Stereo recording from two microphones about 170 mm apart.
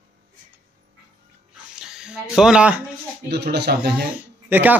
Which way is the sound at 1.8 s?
5° right (ahead or behind).